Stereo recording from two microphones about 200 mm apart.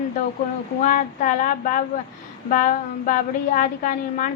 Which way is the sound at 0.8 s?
40° left (ahead or behind).